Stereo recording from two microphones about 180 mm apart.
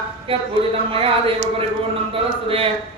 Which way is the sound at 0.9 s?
30° right (ahead or behind).